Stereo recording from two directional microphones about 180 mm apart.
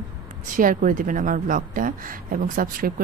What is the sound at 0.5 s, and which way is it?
Speech, 50° right (ahead or behind).